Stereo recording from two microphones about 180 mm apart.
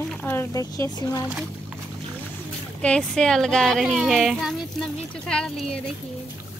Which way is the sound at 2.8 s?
5° left (ahead or behind).